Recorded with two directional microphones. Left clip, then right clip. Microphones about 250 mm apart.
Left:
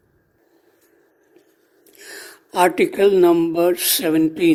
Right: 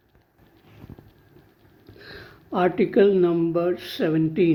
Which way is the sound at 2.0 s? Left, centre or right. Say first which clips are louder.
Left 5 dB; left.